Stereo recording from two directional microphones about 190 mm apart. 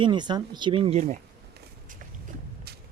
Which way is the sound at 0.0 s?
25° right (ahead or behind).